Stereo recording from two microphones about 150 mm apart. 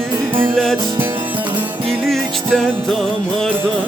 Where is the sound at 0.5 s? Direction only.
Centre (ahead or behind).